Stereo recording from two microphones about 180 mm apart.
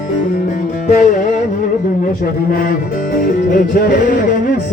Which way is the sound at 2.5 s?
55° left (ahead or behind).